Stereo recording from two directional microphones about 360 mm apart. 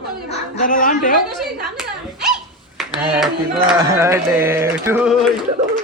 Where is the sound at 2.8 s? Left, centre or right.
Centre.